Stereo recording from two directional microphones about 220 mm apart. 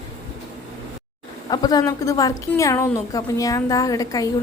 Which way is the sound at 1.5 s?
15° left (ahead or behind).